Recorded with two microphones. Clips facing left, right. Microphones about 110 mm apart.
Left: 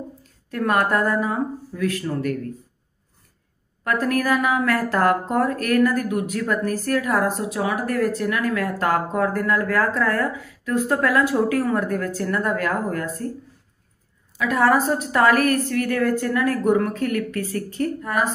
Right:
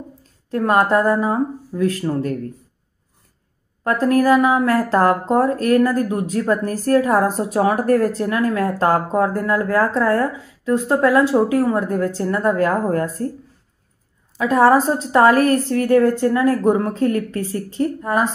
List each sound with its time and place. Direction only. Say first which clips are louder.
0.5 s speech: right 4 dB; 25° right (ahead or behind)
3.8 s speech: right 6 dB; 30° right (ahead or behind)
14.4 s speech: right 5 dB; 30° right (ahead or behind)